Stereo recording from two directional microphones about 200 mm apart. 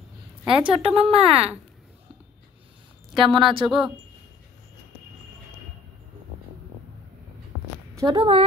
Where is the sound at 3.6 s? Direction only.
Centre (ahead or behind).